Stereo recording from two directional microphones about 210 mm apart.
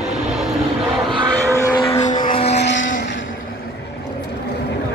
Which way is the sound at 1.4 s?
15° left (ahead or behind).